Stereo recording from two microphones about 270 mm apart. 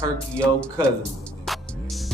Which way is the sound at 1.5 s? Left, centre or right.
Centre.